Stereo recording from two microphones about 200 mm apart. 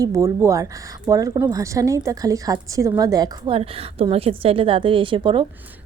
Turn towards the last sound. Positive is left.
turn(degrees=-25)  # may be behind; listen again after turning